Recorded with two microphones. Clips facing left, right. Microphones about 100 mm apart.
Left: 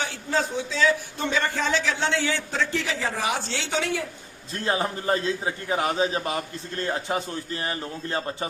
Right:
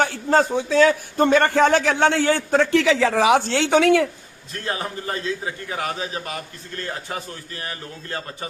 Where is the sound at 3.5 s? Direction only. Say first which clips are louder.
Right 11 dB; 60° right (ahead or behind).